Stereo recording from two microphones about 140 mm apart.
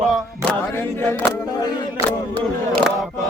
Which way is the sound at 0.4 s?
15° left (ahead or behind).